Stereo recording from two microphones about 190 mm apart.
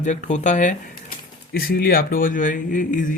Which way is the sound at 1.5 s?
50° left (ahead or behind).